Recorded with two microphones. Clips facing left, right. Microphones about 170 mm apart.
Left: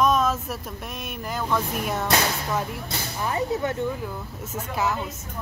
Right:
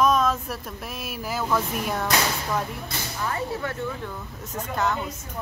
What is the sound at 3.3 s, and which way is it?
Speech, 20° left (ahead or behind).